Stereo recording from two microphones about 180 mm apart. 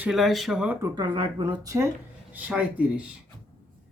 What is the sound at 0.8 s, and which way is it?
Speech, 25° right (ahead or behind).